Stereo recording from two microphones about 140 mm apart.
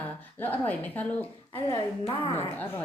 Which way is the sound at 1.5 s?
40° left (ahead or behind).